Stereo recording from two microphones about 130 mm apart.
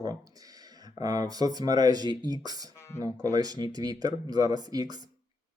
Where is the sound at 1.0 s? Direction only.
30° right (ahead or behind).